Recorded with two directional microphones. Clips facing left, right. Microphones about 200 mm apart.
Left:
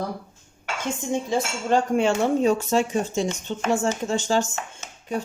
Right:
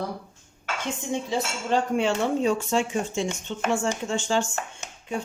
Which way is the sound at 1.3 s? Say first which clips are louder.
Left 3 dB; 45° left (ahead or behind).